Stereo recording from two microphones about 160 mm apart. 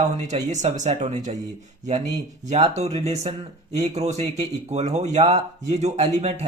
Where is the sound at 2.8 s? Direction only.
40° right (ahead or behind).